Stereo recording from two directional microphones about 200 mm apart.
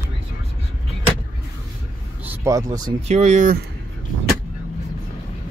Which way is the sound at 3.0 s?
35° right (ahead or behind).